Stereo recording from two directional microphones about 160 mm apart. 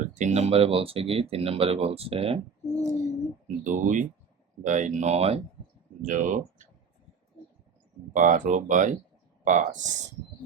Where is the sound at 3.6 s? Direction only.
55° right (ahead or behind).